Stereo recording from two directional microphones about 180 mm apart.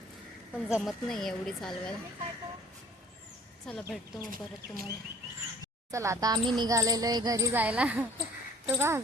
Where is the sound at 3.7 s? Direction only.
5° left (ahead or behind).